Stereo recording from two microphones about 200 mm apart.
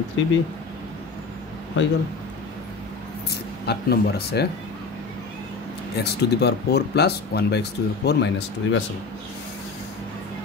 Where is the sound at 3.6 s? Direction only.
55° left (ahead or behind).